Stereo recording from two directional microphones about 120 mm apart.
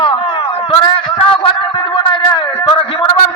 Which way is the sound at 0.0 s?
45° left (ahead or behind).